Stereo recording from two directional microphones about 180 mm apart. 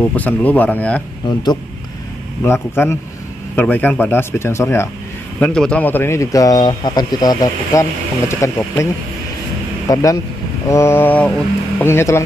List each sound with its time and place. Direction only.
0.0 s speech: 10° left (ahead or behind)
2.4 s speech: 15° left (ahead or behind)
9.8 s speech: 20° left (ahead or behind)